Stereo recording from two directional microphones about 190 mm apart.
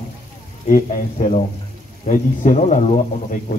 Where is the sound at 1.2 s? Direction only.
40° left (ahead or behind).